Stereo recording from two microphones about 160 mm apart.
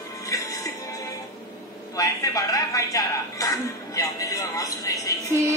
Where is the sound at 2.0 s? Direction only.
20° left (ahead or behind).